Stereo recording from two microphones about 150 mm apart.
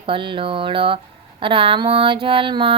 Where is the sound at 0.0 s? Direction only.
35° right (ahead or behind).